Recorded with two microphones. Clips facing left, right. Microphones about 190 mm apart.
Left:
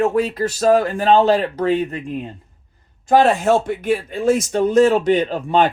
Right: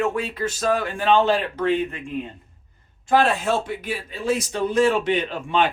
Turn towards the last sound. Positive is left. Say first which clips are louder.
# left 5 dB
turn(degrees=40)  # may be behind; listen again after turning